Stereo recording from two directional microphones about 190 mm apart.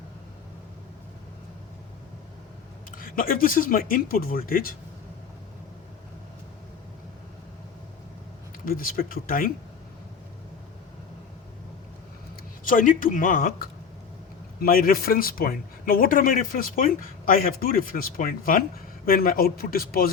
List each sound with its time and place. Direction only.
3.0 s speech: 50° left (ahead or behind)
8.6 s speech: 50° left (ahead or behind)
12.6 s speech: 45° left (ahead or behind)